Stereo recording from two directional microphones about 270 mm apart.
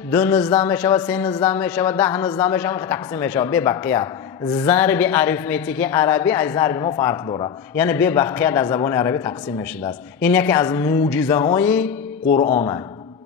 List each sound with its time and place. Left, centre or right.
0.1 s a woman's voice: centre
12.4 s speech: left